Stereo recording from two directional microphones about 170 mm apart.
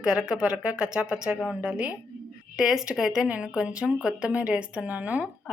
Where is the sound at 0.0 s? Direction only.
5° right (ahead or behind).